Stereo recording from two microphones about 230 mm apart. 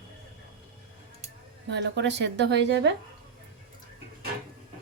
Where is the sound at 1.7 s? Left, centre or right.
Right.